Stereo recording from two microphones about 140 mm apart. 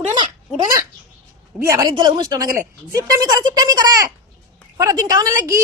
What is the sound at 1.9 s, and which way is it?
Speech, 30° right (ahead or behind).